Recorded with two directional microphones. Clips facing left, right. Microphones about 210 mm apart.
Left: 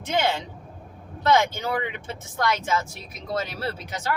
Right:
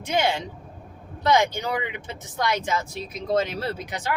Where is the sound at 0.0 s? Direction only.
15° right (ahead or behind).